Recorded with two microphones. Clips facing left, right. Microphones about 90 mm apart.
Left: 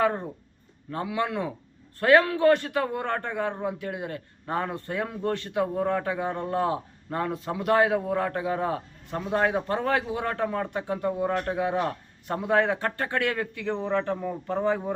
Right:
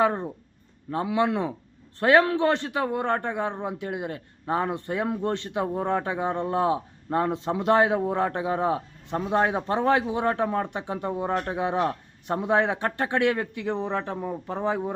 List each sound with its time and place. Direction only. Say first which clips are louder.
0.9 s a man's voice: right 4 dB; 25° right (ahead or behind)